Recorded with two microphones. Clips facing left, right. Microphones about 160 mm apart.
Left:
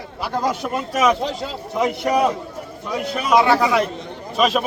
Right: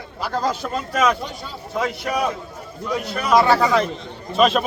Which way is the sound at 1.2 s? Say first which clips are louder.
Left 7 dB; 90° left.